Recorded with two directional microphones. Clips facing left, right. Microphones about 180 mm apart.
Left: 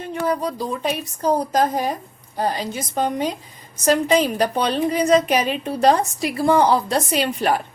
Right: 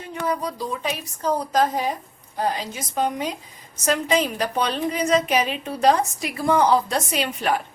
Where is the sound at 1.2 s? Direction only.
40° left (ahead or behind).